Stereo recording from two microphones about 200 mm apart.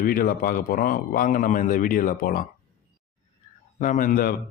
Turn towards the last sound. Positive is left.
turn(degrees=45)  # may be behind; listen again after turning